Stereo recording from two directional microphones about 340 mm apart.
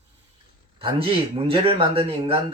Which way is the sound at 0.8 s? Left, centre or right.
Centre.